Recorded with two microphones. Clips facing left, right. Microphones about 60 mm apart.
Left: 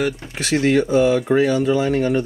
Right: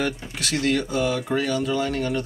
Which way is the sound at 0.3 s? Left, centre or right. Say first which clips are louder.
Left 7 dB; left.